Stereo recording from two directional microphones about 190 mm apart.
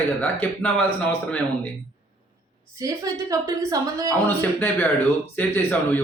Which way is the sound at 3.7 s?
20° right (ahead or behind).